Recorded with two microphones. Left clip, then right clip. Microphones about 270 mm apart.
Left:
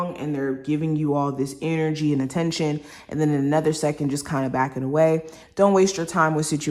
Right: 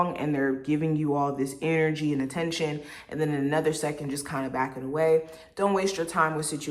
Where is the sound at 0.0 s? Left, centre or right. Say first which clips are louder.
Even; centre.